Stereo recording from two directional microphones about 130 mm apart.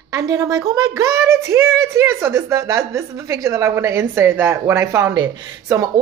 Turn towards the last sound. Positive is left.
turn(degrees=-25)  # may be behind; listen again after turning